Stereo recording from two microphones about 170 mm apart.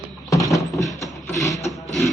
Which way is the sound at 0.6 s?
Centre (ahead or behind).